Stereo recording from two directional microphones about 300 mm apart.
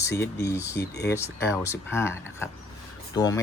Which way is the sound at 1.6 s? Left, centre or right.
Centre.